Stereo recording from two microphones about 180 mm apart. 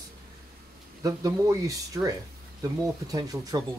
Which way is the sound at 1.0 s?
20° right (ahead or behind).